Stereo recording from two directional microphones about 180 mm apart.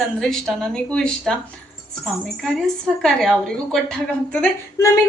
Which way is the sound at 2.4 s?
Centre (ahead or behind).